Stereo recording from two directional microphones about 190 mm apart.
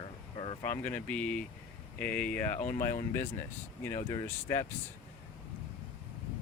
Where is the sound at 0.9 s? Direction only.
5° left (ahead or behind).